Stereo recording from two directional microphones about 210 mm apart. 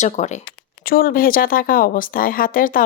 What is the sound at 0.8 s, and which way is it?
Speech, 45° left (ahead or behind).